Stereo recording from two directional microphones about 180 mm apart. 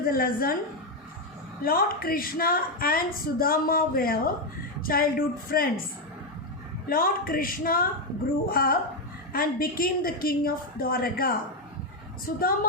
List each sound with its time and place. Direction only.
0.1 s a woman's voice: 55° left (ahead or behind)
1.6 s a woman's voice: 55° left (ahead or behind)
6.8 s a woman's voice: 55° left (ahead or behind)